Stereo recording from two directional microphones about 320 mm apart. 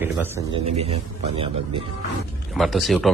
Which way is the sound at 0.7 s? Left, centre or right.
Centre.